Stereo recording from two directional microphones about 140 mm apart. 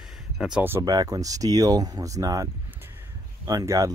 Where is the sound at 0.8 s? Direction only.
25° right (ahead or behind).